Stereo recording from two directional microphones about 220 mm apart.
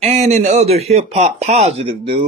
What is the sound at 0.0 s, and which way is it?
Speech, 30° right (ahead or behind).